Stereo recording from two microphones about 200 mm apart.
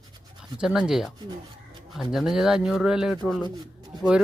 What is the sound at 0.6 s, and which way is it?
Speech, 5° right (ahead or behind).